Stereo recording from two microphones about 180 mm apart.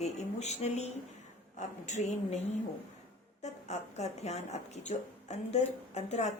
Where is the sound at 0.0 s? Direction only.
40° left (ahead or behind).